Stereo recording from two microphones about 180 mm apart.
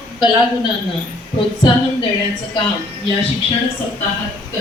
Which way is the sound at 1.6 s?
25° left (ahead or behind).